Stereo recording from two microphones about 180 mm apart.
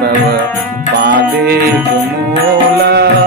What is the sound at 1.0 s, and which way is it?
Music, 60° right (ahead or behind).